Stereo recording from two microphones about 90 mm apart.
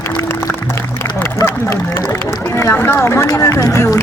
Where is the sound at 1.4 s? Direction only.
30° left (ahead or behind).